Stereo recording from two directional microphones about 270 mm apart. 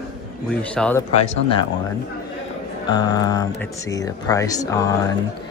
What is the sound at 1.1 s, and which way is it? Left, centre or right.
Speech, left.